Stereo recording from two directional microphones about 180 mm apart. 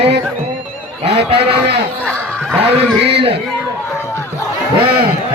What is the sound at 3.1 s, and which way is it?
Speech, 30° right (ahead or behind).